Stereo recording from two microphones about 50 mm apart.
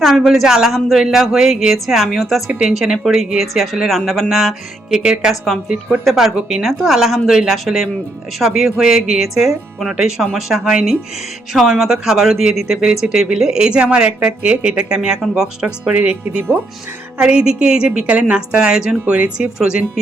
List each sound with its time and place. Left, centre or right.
0.0 s a woman's voice: centre
0.7 s speech: centre
6.1 s a woman's voice: centre
15.6 s speech: right
17.2 s a woman's voice: centre